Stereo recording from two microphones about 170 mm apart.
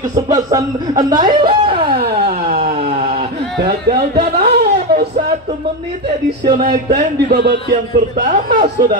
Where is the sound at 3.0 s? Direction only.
40° right (ahead or behind).